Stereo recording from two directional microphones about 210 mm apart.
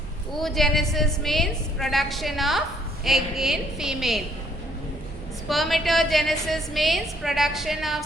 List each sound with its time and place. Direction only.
0.3 s a woman's voice: centre (ahead or behind)
5.5 s a woman's voice: centre (ahead or behind)